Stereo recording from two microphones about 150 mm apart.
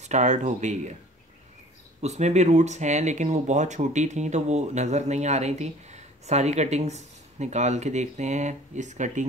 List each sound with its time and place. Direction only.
0.0 s speech: 50° right (ahead or behind)
2.0 s speech: 50° right (ahead or behind)